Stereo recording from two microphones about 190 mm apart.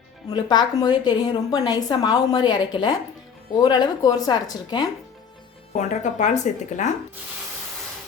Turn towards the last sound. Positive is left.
turn(degrees=40)  # may be behind; listen again after turning